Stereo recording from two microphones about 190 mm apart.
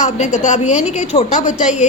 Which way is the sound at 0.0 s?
40° left (ahead or behind).